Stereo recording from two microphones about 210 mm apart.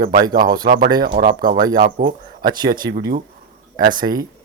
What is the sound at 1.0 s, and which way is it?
Speech, 45° right (ahead or behind).